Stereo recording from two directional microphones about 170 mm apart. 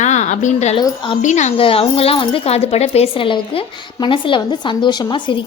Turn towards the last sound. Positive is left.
turn(degrees=30)  # may be behind; listen again after turning